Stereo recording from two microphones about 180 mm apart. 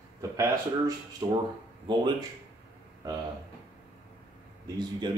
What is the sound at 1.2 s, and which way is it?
Speech, 20° right (ahead or behind).